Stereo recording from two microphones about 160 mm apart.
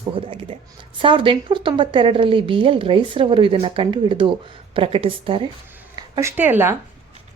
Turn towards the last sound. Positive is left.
turn(degrees=-15)  # may be behind; listen again after turning